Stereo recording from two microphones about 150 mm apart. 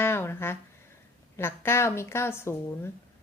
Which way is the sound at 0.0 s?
15° left (ahead or behind).